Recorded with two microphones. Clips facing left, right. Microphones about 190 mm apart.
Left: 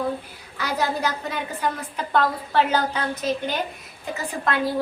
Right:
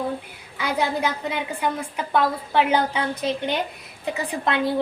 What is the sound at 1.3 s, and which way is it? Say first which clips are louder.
A woman's voice: right 1 dB; 10° right (ahead or behind).